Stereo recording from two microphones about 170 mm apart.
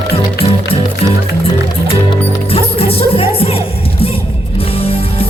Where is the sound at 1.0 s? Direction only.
35° left (ahead or behind).